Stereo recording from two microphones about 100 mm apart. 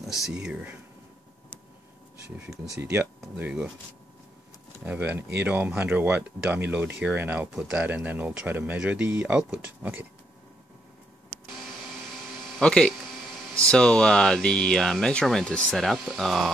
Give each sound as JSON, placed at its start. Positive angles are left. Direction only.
{"t": 0.0, "sound": "speech", "side_deg": -5}
{"t": 2.3, "sound": "speech", "side_deg": -10}
{"t": 2.7, "sound": "speech", "side_deg": -25}
{"t": 4.8, "sound": "speech", "side_deg": -20}
{"t": 12.5, "sound": "speech", "side_deg": 10}